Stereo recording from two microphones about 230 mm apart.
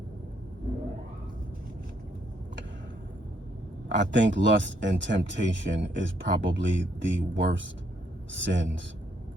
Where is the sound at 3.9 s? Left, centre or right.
Right.